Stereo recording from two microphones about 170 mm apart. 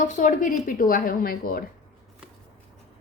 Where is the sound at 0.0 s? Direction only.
45° left (ahead or behind).